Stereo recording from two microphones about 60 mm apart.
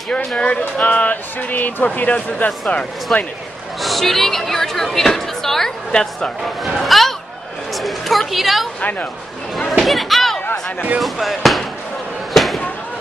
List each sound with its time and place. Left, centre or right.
0.4 s speech: left
3.8 s speech: centre
6.4 s a woman's voice: centre
9.7 s a sound: centre
10.4 s speech: left
11.0 s speech: centre